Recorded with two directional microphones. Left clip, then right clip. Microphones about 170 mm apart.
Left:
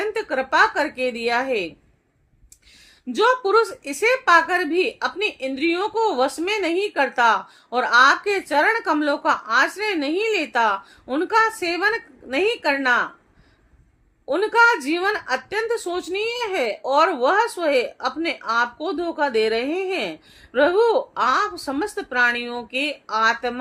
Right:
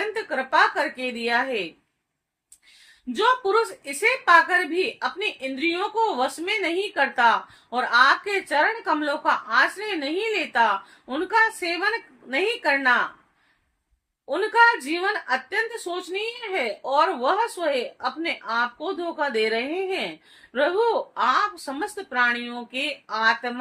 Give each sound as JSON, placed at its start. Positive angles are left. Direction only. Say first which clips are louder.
{"t": 0.0, "sound": "a woman's voice", "louder": "left 3 dB", "side_deg": 45}
{"t": 3.1, "sound": "a woman's voice", "louder": "left 3 dB", "side_deg": 45}
{"t": 14.3, "sound": "a woman's voice", "louder": "left 2 dB", "side_deg": 45}